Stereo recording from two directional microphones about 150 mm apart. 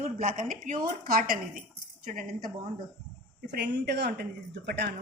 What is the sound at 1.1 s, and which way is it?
Speech, 70° right (ahead or behind).